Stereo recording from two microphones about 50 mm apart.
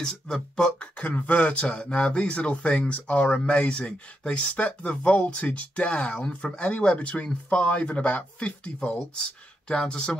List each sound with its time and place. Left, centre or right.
0.0 s speech: centre
0.7 s speech: left
9.7 s speech: centre